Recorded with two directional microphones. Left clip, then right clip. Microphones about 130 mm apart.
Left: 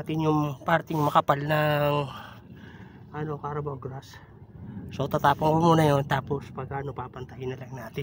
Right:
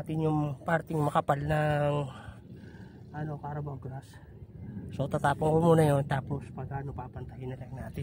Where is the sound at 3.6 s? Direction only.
20° right (ahead or behind).